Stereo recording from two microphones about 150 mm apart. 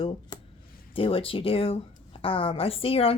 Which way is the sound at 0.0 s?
35° left (ahead or behind).